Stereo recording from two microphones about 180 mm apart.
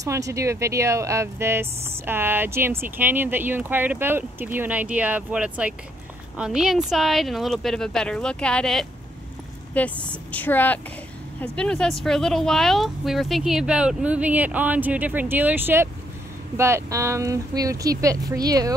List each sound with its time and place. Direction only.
0.0 s speech: 15° right (ahead or behind)